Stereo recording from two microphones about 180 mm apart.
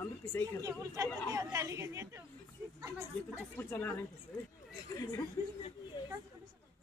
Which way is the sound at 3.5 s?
10° left (ahead or behind).